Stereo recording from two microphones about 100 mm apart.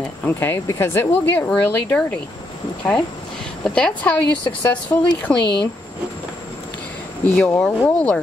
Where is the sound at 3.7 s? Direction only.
10° left (ahead or behind).